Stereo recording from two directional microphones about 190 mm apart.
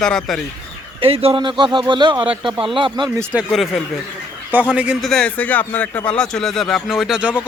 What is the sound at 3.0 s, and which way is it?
Speech, centre (ahead or behind).